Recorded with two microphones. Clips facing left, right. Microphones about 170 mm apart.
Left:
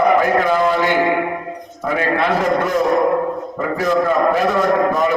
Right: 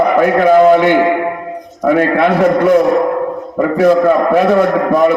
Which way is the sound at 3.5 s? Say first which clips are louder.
Right 9 dB; 55° right (ahead or behind).